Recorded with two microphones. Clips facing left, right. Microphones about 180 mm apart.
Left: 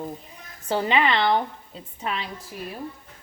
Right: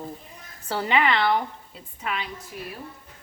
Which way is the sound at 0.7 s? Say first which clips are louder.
Left 1 dB; 20° left (ahead or behind).